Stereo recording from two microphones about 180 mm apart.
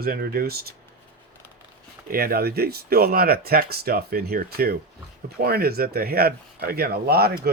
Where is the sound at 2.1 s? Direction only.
55° right (ahead or behind).